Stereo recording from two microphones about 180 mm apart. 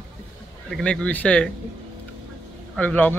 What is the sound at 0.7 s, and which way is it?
Speech, 5° left (ahead or behind).